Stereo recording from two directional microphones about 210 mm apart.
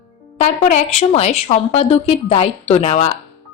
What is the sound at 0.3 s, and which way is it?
A woman's voice, 30° left (ahead or behind).